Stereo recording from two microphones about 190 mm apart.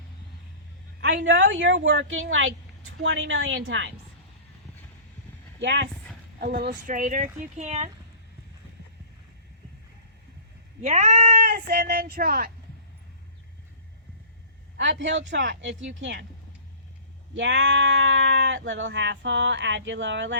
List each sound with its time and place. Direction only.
1.2 s a woman's voice: 80° right
3.0 s speech: 80° right
5.5 s speech: 70° right (ahead or behind)
6.4 s speech: 55° right (ahead or behind); by 7.9 s 35° right (ahead or behind)
10.8 s speech: 35° right (ahead or behind)
14.8 s speech: 70° right (ahead or behind)
17.3 s speech: 70° right (ahead or behind)